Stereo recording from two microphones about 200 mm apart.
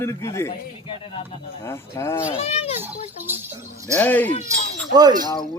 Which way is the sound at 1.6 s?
15° left (ahead or behind).